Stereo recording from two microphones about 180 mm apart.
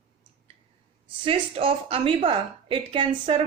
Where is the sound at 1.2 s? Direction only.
30° right (ahead or behind).